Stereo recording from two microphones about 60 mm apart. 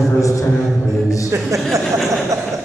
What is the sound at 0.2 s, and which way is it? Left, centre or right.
Speech, left.